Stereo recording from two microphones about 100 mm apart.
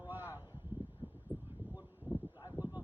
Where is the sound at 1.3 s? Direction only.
20° right (ahead or behind).